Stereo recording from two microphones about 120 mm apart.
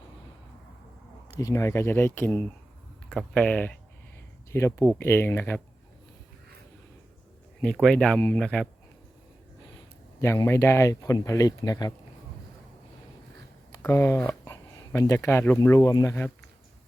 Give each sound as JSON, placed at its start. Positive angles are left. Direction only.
{"t": 1.4, "sound": "speech", "side_deg": 25}
{"t": 3.1, "sound": "speech", "side_deg": 5}
{"t": 4.5, "sound": "speech", "side_deg": 20}
{"t": 7.6, "sound": "speech", "side_deg": 5}
{"t": 10.2, "sound": "speech", "side_deg": 20}
{"t": 13.8, "sound": "speech", "side_deg": 20}